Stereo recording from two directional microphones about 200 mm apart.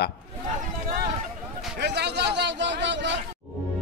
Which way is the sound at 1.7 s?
55° right (ahead or behind).